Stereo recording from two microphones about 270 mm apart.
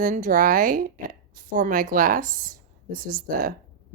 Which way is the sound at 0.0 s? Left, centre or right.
Right.